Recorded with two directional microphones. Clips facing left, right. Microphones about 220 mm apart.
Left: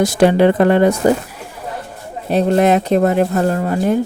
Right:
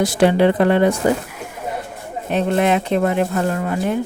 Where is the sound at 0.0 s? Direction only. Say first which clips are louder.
Left 3 dB; 45° left (ahead or behind).